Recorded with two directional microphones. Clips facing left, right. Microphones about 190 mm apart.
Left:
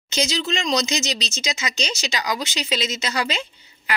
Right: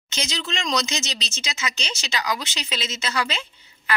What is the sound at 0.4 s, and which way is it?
Speech, 40° left (ahead or behind).